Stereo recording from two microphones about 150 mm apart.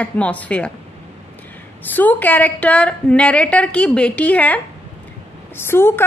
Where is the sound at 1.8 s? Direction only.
10° left (ahead or behind).